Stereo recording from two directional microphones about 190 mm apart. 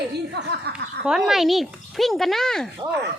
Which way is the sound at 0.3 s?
60° right (ahead or behind).